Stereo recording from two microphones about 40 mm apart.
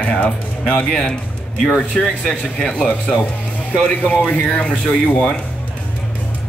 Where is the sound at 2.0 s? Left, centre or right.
Left.